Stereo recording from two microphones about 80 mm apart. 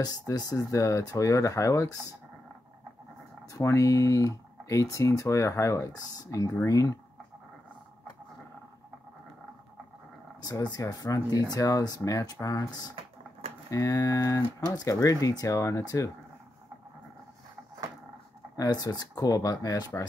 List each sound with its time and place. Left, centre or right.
0.0 s speech: left
3.5 s speech: left
10.4 s speech: left
18.6 s speech: left